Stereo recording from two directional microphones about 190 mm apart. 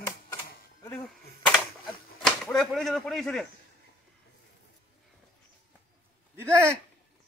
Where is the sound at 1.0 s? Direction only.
Centre (ahead or behind).